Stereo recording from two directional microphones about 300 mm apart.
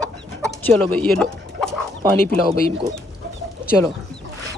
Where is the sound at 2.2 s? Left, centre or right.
Left.